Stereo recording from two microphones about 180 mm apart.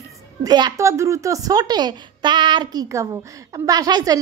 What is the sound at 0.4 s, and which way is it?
A woman's voice, 25° right (ahead or behind).